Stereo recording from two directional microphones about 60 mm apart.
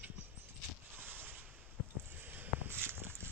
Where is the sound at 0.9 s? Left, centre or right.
Right.